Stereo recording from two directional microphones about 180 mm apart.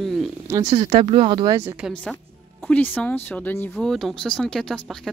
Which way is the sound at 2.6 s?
10° left (ahead or behind).